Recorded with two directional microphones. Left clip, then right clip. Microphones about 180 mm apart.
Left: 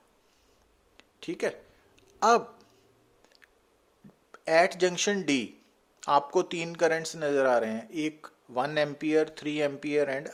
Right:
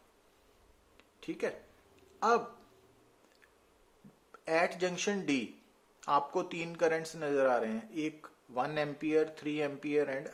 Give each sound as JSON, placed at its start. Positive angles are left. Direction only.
{"t": 0.9, "sound": "a sound", "side_deg": 40}
{"t": 2.1, "sound": "speech", "side_deg": 40}
{"t": 4.3, "sound": "speech", "side_deg": 35}